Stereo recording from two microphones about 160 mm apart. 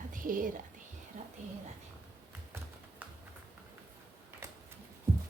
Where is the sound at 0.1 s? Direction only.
60° right (ahead or behind).